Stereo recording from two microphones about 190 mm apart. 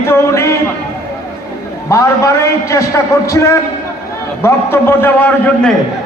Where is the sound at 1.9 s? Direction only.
15° left (ahead or behind).